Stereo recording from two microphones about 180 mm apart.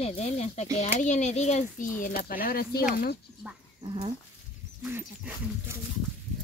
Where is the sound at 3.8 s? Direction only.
30° right (ahead or behind).